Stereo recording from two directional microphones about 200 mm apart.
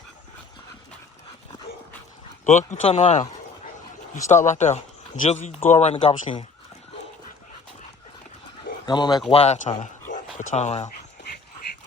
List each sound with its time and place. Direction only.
2.4 s speech: 35° left (ahead or behind)
8.9 s speech: 20° left (ahead or behind)
9.3 s speech: 35° left (ahead or behind)